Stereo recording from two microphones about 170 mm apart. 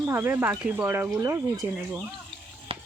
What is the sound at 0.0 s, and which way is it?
Speech, 15° right (ahead or behind).